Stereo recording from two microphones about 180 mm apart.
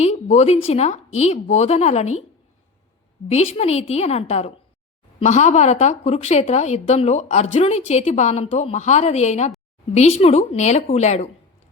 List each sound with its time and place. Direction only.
0.0 s a woman's voice: 35° left (ahead or behind)
3.2 s a woman's voice: 35° left (ahead or behind)